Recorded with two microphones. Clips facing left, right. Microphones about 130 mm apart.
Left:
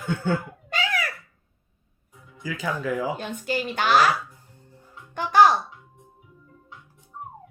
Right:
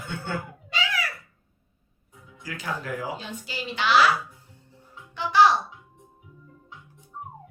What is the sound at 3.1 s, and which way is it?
Mantra, 55° left (ahead or behind).